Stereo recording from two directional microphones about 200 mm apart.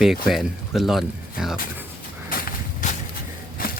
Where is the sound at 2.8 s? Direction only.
40° left (ahead or behind).